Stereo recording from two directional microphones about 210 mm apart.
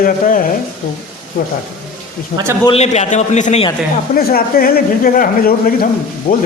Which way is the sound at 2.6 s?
30° left (ahead or behind).